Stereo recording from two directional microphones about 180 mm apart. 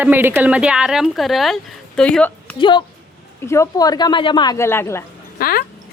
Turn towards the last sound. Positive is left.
turn(degrees=55)  # may be behind; listen again after turning